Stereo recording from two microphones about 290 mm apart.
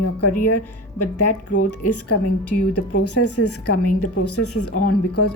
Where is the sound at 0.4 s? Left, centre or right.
Left.